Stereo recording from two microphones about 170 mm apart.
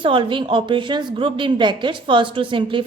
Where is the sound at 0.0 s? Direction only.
30° right (ahead or behind).